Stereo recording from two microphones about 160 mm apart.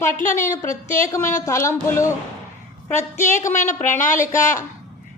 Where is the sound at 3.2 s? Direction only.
50° left (ahead or behind).